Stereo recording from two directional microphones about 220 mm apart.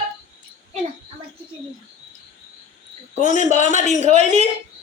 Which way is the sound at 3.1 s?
30° right (ahead or behind).